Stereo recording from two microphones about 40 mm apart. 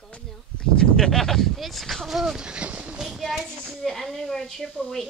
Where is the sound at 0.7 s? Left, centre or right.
Centre.